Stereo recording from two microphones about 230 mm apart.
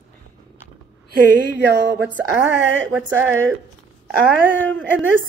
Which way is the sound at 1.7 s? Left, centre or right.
Right.